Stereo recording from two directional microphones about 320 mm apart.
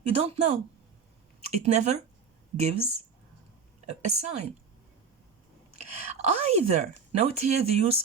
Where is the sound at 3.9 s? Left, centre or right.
Right.